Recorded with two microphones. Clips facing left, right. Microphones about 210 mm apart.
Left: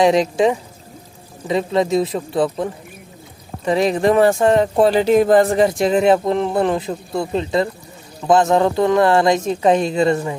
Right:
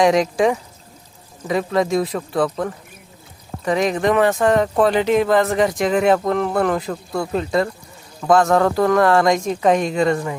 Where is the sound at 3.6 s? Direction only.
30° left (ahead or behind).